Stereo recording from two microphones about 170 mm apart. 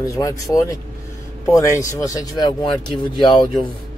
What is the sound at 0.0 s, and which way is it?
Speech, 20° left (ahead or behind).